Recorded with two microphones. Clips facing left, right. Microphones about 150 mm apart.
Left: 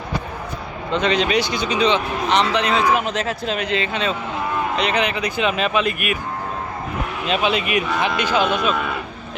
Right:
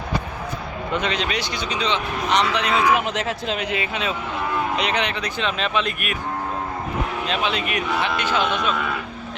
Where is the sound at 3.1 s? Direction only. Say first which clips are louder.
Left 2 dB; 20° right (ahead or behind).